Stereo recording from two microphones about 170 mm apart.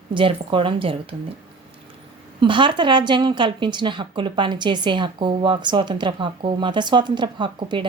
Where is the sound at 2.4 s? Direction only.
30° right (ahead or behind).